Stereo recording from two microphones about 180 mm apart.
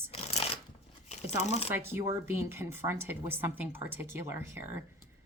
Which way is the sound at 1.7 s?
15° right (ahead or behind).